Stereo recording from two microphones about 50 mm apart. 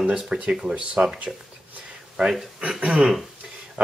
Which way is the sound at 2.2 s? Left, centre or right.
Centre.